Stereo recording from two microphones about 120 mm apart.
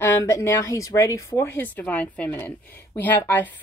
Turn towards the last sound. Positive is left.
turn(degrees=15)  # may be behind; listen again after turning